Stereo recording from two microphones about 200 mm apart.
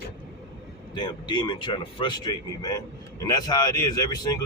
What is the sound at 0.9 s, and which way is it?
Speech, 20° left (ahead or behind).